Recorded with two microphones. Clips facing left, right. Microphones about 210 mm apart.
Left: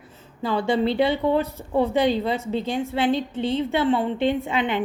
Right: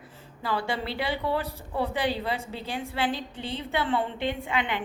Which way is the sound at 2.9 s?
20° left (ahead or behind).